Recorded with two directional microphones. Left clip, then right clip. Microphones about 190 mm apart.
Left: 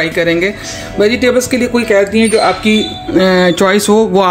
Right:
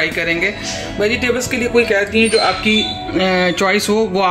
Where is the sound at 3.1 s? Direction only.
40° left (ahead or behind).